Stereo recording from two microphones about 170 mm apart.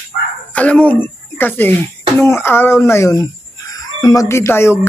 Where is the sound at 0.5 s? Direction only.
10° left (ahead or behind).